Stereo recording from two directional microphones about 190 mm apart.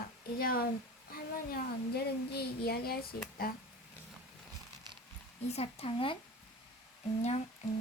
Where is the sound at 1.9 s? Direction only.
55° left (ahead or behind).